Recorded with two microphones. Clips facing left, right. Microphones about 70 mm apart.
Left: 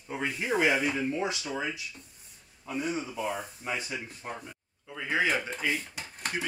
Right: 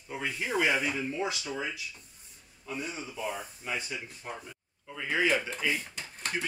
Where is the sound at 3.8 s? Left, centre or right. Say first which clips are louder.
Left 2 dB; left.